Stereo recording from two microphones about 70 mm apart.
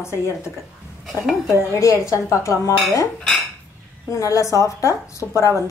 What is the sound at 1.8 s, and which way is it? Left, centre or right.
Speech, left.